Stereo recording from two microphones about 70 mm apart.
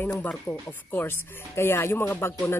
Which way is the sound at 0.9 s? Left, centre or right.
Left.